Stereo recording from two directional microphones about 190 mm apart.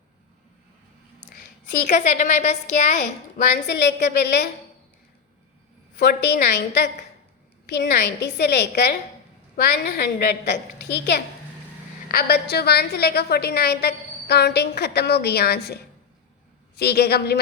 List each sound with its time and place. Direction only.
1.9 s a woman's voice: 40° left (ahead or behind)
3.7 s a woman's voice: 65° left (ahead or behind)
6.0 s a woman's voice: 65° left (ahead or behind)